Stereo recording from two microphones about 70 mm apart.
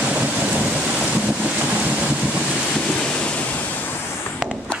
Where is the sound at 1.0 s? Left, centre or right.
Centre.